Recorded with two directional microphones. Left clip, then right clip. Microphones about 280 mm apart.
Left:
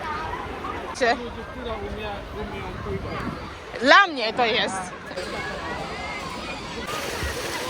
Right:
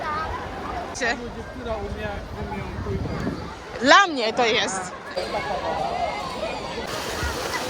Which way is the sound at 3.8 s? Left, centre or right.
Centre.